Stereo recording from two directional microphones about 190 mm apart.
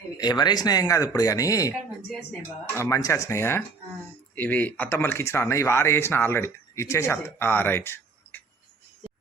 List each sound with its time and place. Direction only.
0.2 s speech: 20° left (ahead or behind)
2.7 s speech: 15° left (ahead or behind)